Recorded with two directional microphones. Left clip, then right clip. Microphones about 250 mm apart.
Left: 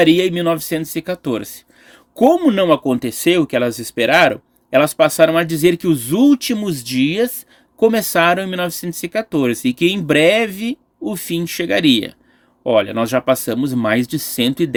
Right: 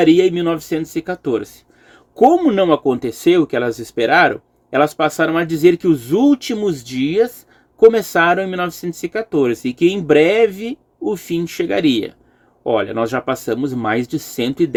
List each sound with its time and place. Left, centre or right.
0.1 s speech: left